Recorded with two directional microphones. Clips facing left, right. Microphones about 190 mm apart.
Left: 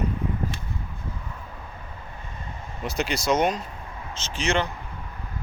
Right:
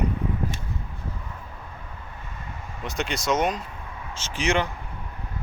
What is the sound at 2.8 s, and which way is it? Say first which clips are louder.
Speech: left 2 dB; centre (ahead or behind).